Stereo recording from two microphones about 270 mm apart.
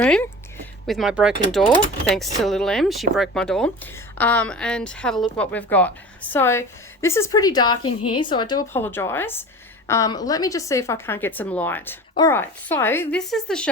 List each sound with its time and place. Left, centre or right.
0.0 s a woman's voice: centre